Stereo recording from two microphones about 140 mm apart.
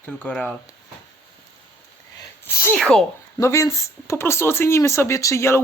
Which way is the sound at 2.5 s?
15° left (ahead or behind).